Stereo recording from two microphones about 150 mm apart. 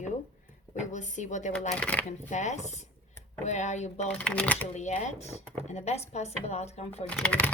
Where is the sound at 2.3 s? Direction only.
50° left (ahead or behind).